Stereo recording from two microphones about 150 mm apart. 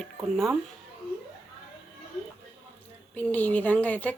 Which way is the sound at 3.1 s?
10° left (ahead or behind).